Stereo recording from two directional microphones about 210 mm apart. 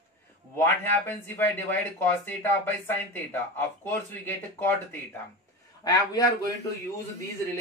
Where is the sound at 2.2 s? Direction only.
10° left (ahead or behind).